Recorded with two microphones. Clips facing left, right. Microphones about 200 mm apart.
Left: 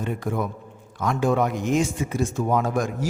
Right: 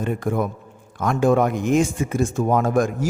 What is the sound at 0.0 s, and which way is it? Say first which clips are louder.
A man's voice: right 4 dB; 50° right (ahead or behind).